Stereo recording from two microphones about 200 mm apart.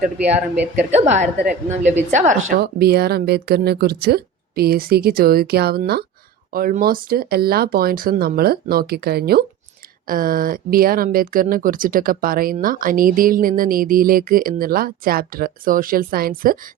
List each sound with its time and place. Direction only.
0.2 s a woman's voice: 5° right (ahead or behind)
0.9 s a woman's voice: 35° right (ahead or behind)
2.6 s speech: 50° right (ahead or behind)